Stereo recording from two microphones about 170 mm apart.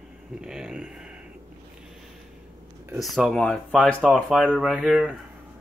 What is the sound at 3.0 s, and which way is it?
Speech, centre (ahead or behind).